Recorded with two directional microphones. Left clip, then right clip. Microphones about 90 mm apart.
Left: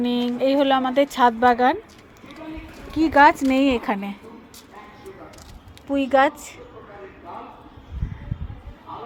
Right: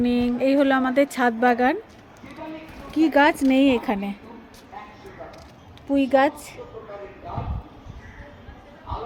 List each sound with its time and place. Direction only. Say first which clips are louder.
0.0 s a woman's voice: even; 25° right (ahead or behind)
2.9 s a woman's voice: left 3 dB; 25° right (ahead or behind)
5.9 s a woman's voice: left 1 dB; 25° right (ahead or behind)